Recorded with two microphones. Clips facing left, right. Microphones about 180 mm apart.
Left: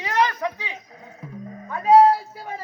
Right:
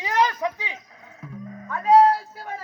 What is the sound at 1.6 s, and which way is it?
Speech, 15° left (ahead or behind).